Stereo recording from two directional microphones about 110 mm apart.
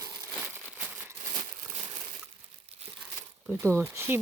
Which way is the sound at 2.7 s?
70° right (ahead or behind).